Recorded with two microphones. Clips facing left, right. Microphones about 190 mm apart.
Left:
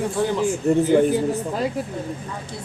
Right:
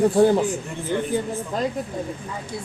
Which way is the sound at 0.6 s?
40° left (ahead or behind).